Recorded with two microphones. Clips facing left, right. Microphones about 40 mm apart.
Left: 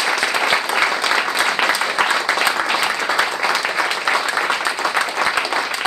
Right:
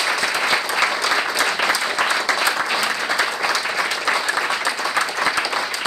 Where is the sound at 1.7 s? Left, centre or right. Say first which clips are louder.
Left 2 dB; left.